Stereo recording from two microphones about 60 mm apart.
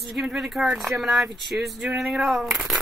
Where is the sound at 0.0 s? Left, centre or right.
Centre.